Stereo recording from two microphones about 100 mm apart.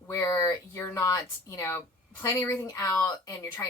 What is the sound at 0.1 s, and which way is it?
A woman's voice, 30° left (ahead or behind).